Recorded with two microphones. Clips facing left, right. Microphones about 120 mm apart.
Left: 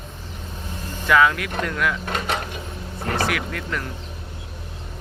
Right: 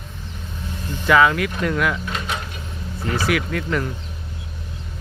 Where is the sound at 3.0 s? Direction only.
60° left (ahead or behind).